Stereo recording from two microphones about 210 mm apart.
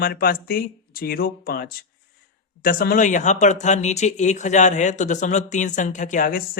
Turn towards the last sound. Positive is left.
turn(degrees=40)  # may be behind; listen again after turning